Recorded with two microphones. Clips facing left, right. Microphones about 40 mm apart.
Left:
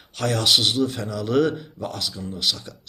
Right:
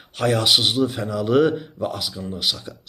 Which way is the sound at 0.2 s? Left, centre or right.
Centre.